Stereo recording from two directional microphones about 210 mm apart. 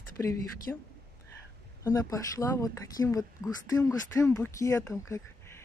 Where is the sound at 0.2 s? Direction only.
15° left (ahead or behind).